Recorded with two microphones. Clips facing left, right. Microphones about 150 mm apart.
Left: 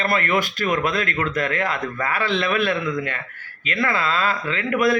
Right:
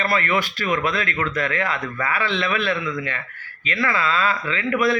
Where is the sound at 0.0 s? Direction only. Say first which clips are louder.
Left 1 dB; 45° left (ahead or behind).